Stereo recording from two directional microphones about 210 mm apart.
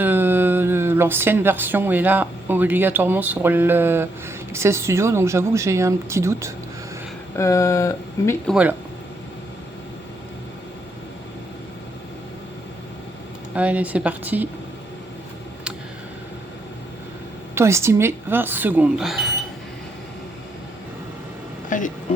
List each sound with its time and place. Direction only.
0.0 s speech: 10° right (ahead or behind)
7.3 s speech: 15° left (ahead or behind)
8.4 s speech: 5° right (ahead or behind)
13.6 s speech: 5° right (ahead or behind)
17.5 s speech: 15° right (ahead or behind)
21.7 s speech: 40° left (ahead or behind)